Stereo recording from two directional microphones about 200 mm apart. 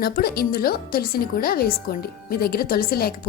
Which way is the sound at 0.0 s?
50° left (ahead or behind).